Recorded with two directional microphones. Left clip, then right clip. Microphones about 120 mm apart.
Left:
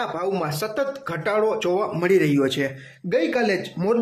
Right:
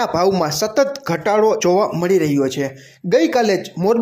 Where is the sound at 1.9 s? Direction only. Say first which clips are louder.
Right 3 dB; 20° right (ahead or behind).